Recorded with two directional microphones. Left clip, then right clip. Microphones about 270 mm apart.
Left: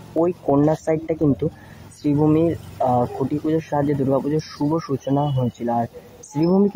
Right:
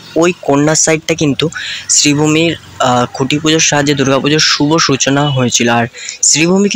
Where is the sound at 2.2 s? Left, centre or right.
Centre.